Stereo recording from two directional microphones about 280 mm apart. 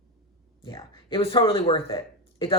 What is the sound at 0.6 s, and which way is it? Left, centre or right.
Speech, centre.